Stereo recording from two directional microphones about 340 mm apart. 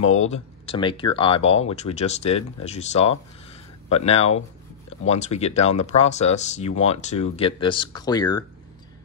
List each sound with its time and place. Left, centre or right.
0.3 s speech: centre